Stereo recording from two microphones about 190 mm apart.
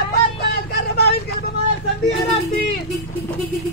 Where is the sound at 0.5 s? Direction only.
60° left (ahead or behind).